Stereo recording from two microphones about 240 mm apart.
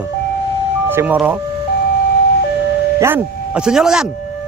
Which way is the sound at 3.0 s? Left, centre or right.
Centre.